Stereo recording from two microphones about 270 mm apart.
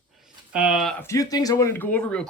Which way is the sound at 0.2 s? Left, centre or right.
Centre.